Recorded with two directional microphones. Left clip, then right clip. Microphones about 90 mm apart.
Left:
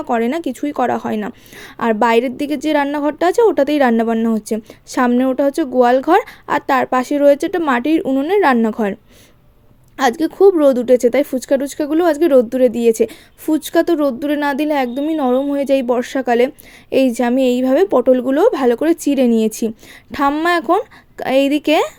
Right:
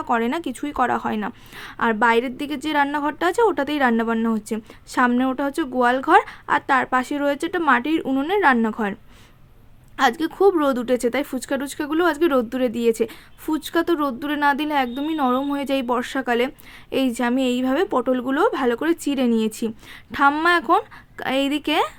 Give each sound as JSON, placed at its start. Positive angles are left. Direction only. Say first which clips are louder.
{"t": 0.0, "sound": "a woman's voice", "louder": "left 4 dB", "side_deg": 30}
{"t": 8.0, "sound": "speech", "louder": "left 6 dB", "side_deg": 20}
{"t": 8.3, "sound": "a woman's voice", "louder": "left 4 dB", "side_deg": 45}
{"t": 10.0, "sound": "a woman's voice", "louder": "left 5 dB", "side_deg": 30}
{"t": 15.0, "sound": "a woman's voice", "louder": "left 5 dB", "side_deg": 25}